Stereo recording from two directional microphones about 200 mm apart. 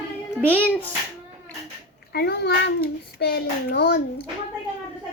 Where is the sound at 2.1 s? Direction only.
55° left (ahead or behind).